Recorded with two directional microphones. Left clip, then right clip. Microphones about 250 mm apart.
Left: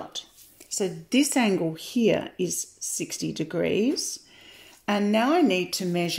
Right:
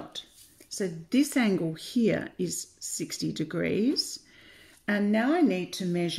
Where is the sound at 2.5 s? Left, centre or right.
Left.